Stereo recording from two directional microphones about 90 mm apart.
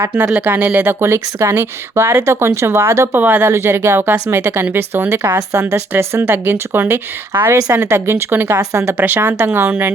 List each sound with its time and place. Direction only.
0.0 s speech: 20° right (ahead or behind)
3.2 s speech: 20° right (ahead or behind)
3.5 s speech: 30° right (ahead or behind)